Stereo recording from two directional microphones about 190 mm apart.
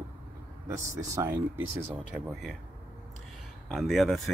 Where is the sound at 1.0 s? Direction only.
15° right (ahead or behind).